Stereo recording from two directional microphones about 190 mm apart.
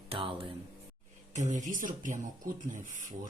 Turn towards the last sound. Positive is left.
turn(degrees=-40)  # may be behind; listen again after turning